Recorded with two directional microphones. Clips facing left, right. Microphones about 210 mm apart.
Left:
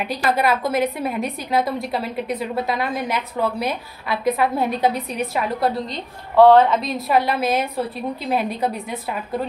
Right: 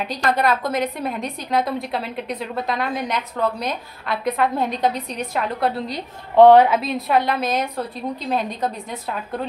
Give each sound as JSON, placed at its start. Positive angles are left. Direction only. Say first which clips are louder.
{"t": 0.1, "sound": "a woman's voice", "louder": "even", "side_deg": 5}
{"t": 6.3, "sound": "a woman's voice", "louder": "right 1 dB", "side_deg": -15}
{"t": 6.8, "sound": "a woman's voice", "louder": "even", "side_deg": 0}